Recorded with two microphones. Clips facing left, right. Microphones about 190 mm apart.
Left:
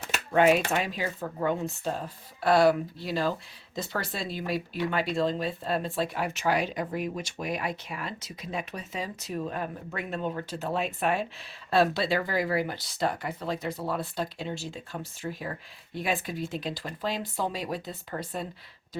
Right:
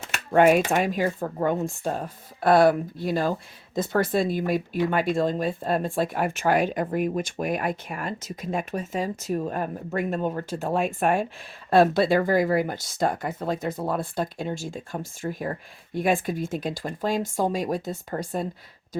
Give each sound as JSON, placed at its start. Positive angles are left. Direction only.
{"t": 0.3, "sound": "speech", "side_deg": -50}